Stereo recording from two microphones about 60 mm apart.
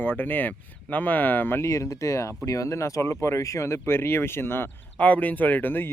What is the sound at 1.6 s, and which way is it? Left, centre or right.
Speech, left.